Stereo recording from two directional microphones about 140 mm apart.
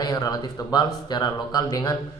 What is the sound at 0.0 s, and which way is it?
A man's voice, 25° left (ahead or behind).